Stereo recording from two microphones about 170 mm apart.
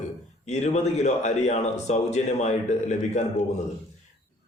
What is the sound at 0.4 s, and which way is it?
A man's voice, 40° left (ahead or behind).